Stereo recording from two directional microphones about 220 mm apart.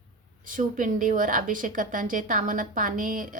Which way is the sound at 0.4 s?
35° right (ahead or behind).